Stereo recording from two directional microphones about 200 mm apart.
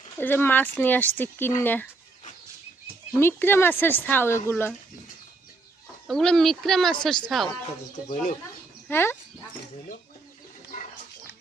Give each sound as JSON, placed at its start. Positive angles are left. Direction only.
{"t": 0.2, "sound": "speech", "side_deg": 10}
{"t": 3.2, "sound": "speech", "side_deg": 10}
{"t": 6.1, "sound": "a woman's voice", "side_deg": 0}
{"t": 8.1, "sound": "speech", "side_deg": 40}
{"t": 8.9, "sound": "speech", "side_deg": 10}